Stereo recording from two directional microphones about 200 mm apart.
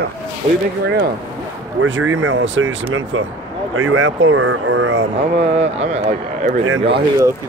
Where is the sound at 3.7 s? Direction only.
90° right.